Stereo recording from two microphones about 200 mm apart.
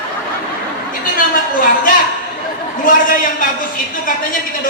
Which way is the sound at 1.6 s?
45° left (ahead or behind).